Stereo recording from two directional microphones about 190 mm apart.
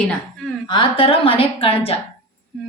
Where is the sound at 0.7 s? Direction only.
25° left (ahead or behind).